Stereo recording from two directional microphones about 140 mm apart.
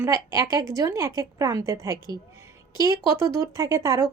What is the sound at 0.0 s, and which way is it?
A woman's voice, 20° right (ahead or behind).